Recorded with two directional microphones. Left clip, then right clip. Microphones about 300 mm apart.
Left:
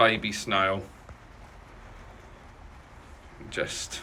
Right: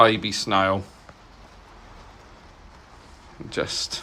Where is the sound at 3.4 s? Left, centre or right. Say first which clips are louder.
Right 5 dB; centre.